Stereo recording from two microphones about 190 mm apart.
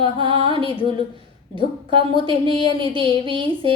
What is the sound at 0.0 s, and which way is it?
Music, 25° right (ahead or behind).